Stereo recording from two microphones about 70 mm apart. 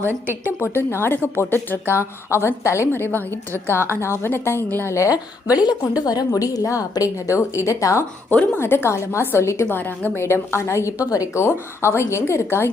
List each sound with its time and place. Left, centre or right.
0.0 s a woman's voice: right
0.6 s a woman's voice: left
5.1 s a woman's voice: right
6.0 s a woman's voice: left
8.5 s a woman's voice: left
9.6 s a woman's voice: left
11.3 s a woman's voice: left